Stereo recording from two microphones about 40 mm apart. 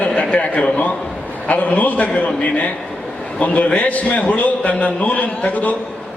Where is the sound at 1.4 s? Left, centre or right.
Left.